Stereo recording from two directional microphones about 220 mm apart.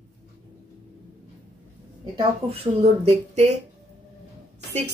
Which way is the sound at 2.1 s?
30° right (ahead or behind).